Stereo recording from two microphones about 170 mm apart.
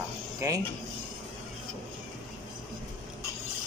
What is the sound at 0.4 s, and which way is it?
Mantra, 20° right (ahead or behind).